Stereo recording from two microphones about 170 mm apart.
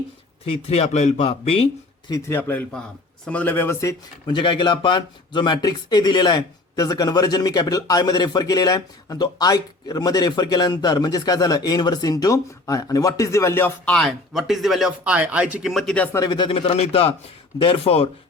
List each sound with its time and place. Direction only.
0.5 s a man's voice: 40° left (ahead or behind)
2.0 s a man's voice: 20° left (ahead or behind); by 16.0 s centre (ahead or behind)
16.1 s a man's voice: 25° left (ahead or behind)